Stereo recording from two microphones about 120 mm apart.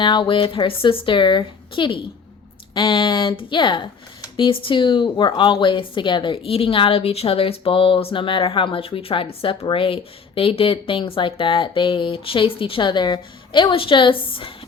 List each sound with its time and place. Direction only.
0.0 s speech: 40° left (ahead or behind)